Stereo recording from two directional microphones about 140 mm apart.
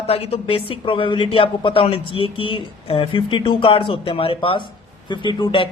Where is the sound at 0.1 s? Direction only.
45° left (ahead or behind).